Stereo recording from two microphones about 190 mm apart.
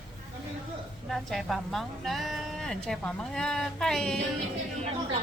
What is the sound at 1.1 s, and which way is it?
A woman's voice, centre (ahead or behind).